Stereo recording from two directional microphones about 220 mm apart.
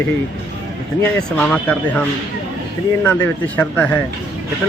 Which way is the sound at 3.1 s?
10° left (ahead or behind).